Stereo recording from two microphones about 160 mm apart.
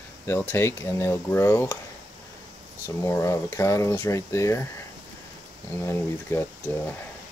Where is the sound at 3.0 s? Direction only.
15° left (ahead or behind).